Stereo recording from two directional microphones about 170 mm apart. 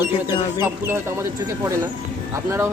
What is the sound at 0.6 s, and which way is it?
Speech, 15° right (ahead or behind).